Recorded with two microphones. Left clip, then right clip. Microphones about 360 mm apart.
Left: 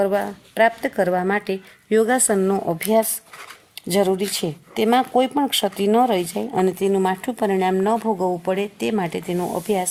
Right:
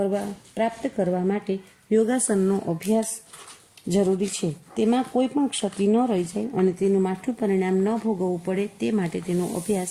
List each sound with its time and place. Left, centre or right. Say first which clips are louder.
0.0 s a woman's voice: left 6 dB; left
1.3 s a woman's voice: left 5 dB; centre
2.1 s a woman's voice: left 4 dB; left
4.4 s speech: left 4 dB; left